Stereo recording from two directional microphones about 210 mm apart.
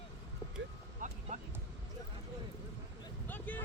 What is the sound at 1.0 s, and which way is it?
Vehicle, 35° right (ahead or behind).